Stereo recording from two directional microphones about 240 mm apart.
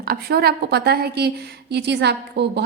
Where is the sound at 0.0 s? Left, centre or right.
Right.